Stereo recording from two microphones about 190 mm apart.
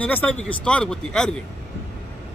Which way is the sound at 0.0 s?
10° left (ahead or behind).